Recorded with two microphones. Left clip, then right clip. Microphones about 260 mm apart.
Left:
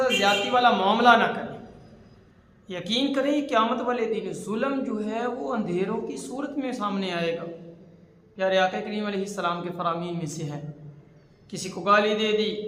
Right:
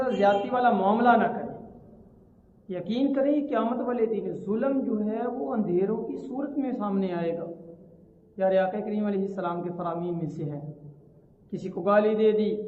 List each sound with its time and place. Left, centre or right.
0.0 s a man's voice: centre
2.6 s a man's voice: centre
8.4 s a man's voice: centre
11.5 s a man's voice: centre